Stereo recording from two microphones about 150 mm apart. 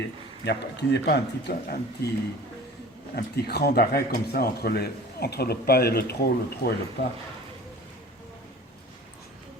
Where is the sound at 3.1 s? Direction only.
90° left.